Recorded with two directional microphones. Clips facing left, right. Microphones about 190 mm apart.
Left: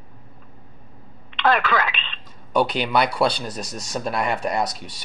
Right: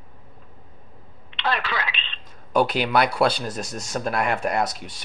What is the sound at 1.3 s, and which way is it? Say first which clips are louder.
Telephone: left 6 dB; 50° left (ahead or behind).